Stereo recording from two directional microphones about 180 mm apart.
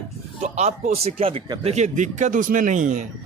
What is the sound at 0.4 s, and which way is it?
Speech, 40° right (ahead or behind).